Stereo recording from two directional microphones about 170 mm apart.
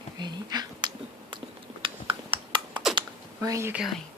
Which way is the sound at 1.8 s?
30° right (ahead or behind).